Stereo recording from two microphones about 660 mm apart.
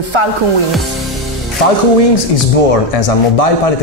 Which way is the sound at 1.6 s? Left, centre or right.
Left.